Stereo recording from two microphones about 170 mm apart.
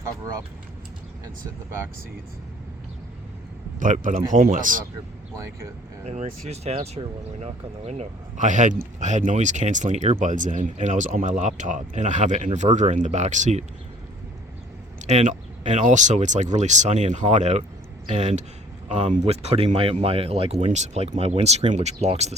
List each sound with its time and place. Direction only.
3.8 s speech: 50° right (ahead or behind)
6.1 s speech: 40° right (ahead or behind)
15.0 s speech: 45° right (ahead or behind)